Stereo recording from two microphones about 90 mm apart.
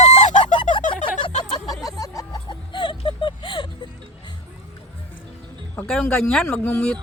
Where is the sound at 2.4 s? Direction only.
65° left (ahead or behind).